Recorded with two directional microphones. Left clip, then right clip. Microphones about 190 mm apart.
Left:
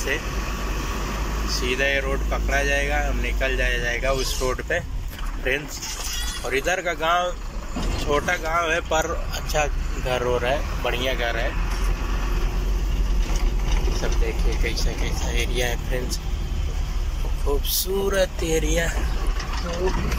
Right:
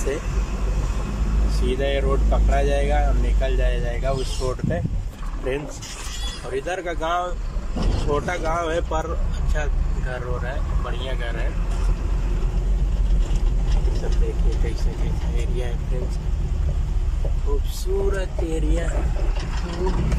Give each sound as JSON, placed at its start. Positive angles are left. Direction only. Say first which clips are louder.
{"t": 1.7, "sound": "speech", "louder": "even", "side_deg": -15}
{"t": 9.5, "sound": "speech", "louder": "left 7 dB", "side_deg": 10}
{"t": 15.3, "sound": "speech", "louder": "left 8 dB", "side_deg": -5}
{"t": 18.1, "sound": "speech", "louder": "left 6 dB", "side_deg": -5}